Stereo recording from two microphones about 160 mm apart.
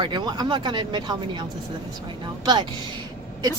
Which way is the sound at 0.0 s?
25° right (ahead or behind).